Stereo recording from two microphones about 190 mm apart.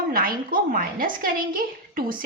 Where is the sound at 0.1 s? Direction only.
50° right (ahead or behind).